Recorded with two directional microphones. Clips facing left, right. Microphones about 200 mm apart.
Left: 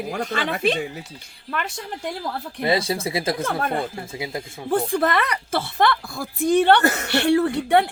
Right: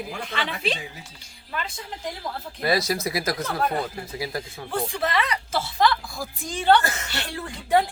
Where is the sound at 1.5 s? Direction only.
70° left (ahead or behind).